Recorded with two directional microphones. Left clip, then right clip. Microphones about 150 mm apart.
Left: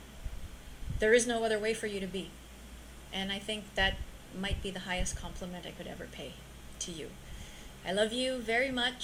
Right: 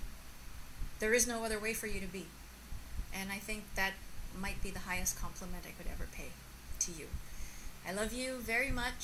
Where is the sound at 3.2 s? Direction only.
15° right (ahead or behind).